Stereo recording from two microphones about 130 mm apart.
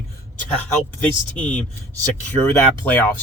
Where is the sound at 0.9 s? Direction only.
10° left (ahead or behind).